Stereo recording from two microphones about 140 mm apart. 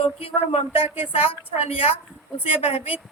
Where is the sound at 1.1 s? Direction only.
45° left (ahead or behind).